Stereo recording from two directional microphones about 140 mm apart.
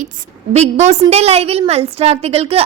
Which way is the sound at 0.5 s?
50° right (ahead or behind).